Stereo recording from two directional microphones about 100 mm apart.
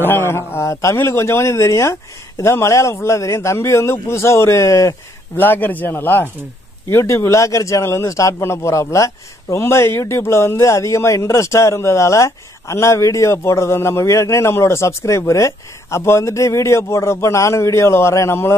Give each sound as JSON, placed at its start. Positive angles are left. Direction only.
{"t": 0.0, "sound": "speech", "side_deg": 25}
{"t": 5.4, "sound": "speech", "side_deg": 20}